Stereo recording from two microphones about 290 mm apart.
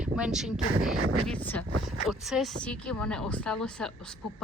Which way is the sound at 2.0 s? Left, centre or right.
Centre.